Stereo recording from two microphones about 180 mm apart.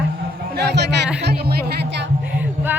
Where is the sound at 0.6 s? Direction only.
70° right (ahead or behind).